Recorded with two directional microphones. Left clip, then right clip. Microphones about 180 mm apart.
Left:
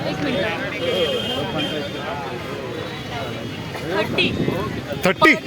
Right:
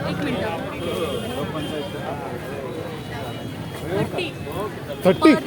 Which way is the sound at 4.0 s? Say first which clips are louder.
Left 6 dB; 25° left (ahead or behind).